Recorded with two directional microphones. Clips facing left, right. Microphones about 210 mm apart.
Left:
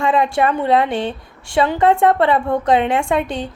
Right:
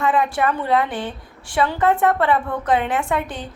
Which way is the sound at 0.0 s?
25° left (ahead or behind).